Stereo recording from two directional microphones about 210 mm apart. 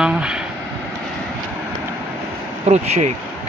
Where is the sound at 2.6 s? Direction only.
30° right (ahead or behind).